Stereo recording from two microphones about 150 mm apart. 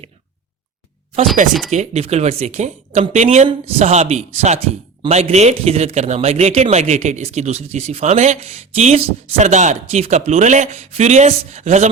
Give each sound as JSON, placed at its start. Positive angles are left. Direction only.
{"t": 1.7, "sound": "a man's voice", "side_deg": -50}